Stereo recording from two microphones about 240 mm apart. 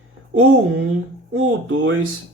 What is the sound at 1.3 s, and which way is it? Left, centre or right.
Speech, right.